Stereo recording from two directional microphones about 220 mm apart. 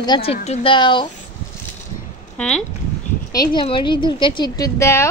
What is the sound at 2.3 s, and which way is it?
Speech, 5° left (ahead or behind).